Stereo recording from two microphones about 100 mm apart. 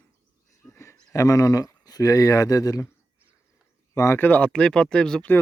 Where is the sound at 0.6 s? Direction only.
30° left (ahead or behind).